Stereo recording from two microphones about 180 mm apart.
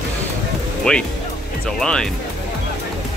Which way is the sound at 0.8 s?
5° left (ahead or behind).